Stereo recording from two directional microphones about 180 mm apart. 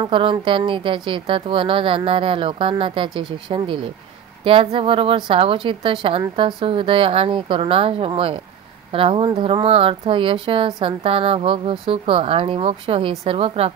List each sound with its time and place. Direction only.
0.0 s a woman's voice: 30° right (ahead or behind)